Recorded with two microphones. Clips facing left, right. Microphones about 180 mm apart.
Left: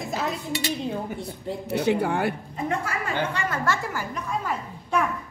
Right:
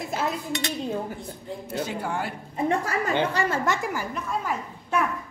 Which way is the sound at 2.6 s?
35° right (ahead or behind).